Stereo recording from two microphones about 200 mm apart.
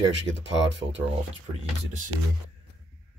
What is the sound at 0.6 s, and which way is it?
Speech, 65° right (ahead or behind).